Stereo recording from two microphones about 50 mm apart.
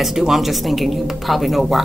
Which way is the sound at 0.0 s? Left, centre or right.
Centre.